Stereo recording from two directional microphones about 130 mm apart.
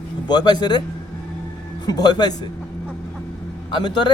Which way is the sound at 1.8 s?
30° left (ahead or behind).